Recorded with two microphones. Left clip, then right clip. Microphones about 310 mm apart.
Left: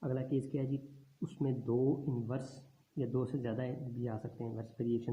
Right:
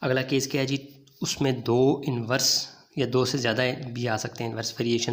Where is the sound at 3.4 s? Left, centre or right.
Right.